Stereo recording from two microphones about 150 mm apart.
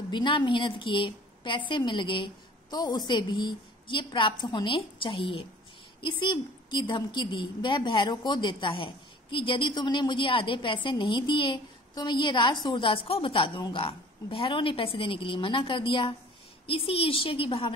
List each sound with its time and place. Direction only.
0.1 s a woman's voice: 30° left (ahead or behind)